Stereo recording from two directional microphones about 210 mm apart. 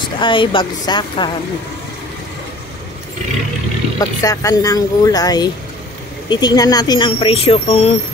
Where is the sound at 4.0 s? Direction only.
15° left (ahead or behind).